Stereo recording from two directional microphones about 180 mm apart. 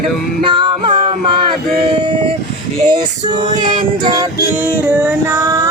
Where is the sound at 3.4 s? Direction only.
25° right (ahead or behind).